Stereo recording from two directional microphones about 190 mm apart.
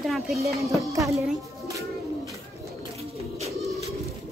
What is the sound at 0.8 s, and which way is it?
Speech, 15° right (ahead or behind).